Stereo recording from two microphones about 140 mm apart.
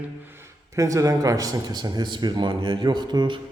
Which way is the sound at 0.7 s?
25° right (ahead or behind).